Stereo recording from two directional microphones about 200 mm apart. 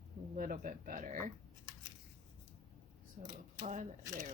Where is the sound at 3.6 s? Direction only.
40° right (ahead or behind).